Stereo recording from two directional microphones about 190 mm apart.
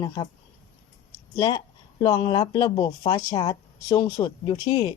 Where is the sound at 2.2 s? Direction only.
25° left (ahead or behind).